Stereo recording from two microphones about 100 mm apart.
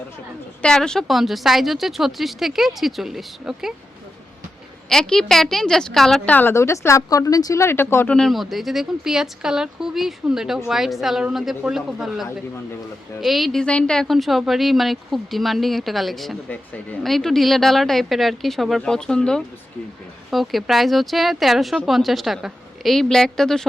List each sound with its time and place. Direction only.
0.6 s a woman's voice: 5° left (ahead or behind)
4.9 s a woman's voice: 5° left (ahead or behind)
6.5 s speech: 25° left (ahead or behind)
8.1 s a woman's voice: 5° left (ahead or behind)
16.5 s speech: 15° left (ahead or behind)
17.0 s a woman's voice: 5° left (ahead or behind)